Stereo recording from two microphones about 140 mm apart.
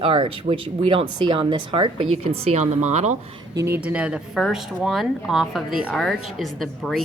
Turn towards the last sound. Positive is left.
turn(degrees=0)  # may be behind; listen again after turning